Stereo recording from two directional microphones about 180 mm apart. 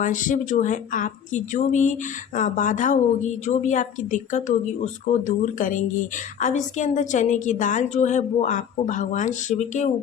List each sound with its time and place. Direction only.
0.0 s speech: 45° left (ahead or behind)